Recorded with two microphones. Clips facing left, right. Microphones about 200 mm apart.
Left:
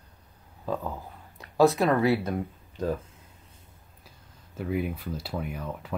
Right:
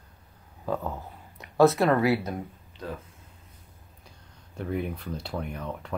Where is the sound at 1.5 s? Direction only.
15° left (ahead or behind).